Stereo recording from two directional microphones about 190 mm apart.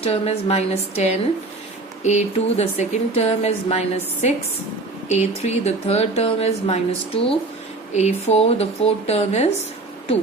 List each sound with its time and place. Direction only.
0.0 s speech: 30° left (ahead or behind)